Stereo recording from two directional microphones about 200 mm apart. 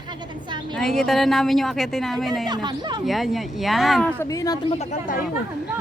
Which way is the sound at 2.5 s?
20° right (ahead or behind).